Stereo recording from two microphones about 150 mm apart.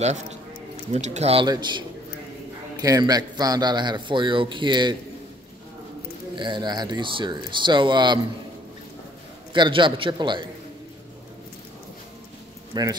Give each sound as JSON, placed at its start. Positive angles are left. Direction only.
{"t": 0.9, "sound": "speech", "side_deg": -50}
{"t": 1.5, "sound": "a man's voice", "side_deg": -30}
{"t": 6.3, "sound": "speech", "side_deg": -30}
{"t": 9.5, "sound": "speech", "side_deg": -35}
{"t": 12.7, "sound": "a man's voice", "side_deg": -25}